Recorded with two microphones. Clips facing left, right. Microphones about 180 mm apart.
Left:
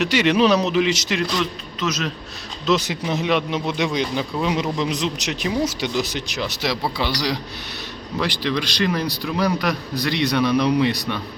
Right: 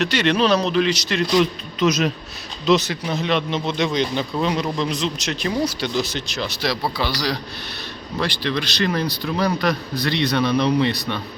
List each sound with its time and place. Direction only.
0.0 s speech: 10° left (ahead or behind)
1.4 s a man's voice: 15° right (ahead or behind)
2.6 s a man's voice: 10° left (ahead or behind)